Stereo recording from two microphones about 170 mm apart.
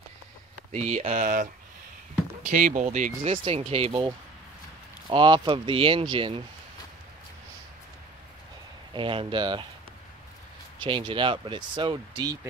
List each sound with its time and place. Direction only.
0.7 s speech: 40° right (ahead or behind)
3.3 s speech: 35° right (ahead or behind)
5.0 s speech: 30° right (ahead or behind)
8.9 s speech: 30° right (ahead or behind)
10.8 s speech: 30° right (ahead or behind)